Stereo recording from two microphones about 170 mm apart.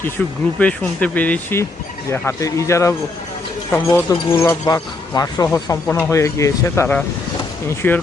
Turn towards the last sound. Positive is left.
turn(degrees=15)  # may be behind; listen again after turning